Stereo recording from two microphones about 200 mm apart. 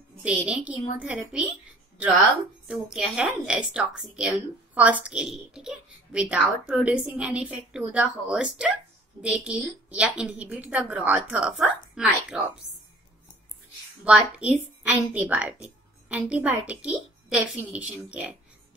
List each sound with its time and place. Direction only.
0.2 s a woman's voice: 5° right (ahead or behind)
2.7 s a woman's voice: 5° right (ahead or behind)
14.0 s a woman's voice: 5° right (ahead or behind)